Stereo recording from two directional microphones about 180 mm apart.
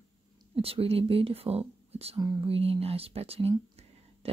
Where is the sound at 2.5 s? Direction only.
35° right (ahead or behind).